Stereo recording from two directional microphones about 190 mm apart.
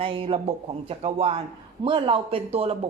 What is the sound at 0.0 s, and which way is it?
A woman's voice, 30° right (ahead or behind).